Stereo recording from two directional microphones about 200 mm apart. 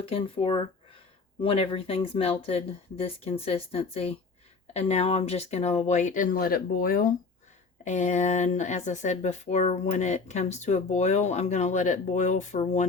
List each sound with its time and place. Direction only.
0.1 s speech: 25° left (ahead or behind)